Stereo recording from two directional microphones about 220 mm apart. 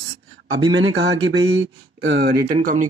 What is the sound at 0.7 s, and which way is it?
Speech, 60° right (ahead or behind).